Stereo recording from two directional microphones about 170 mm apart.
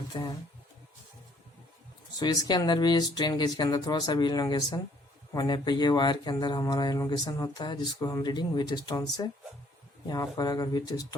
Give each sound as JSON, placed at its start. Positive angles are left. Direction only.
{"t": 0.1, "sound": "speech", "side_deg": 25}
{"t": 2.1, "sound": "speech", "side_deg": 25}